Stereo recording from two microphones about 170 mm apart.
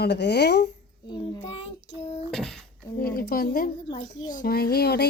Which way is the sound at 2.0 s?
35° left (ahead or behind).